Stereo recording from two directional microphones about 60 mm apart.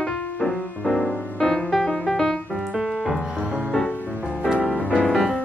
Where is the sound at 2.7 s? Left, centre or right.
Centre.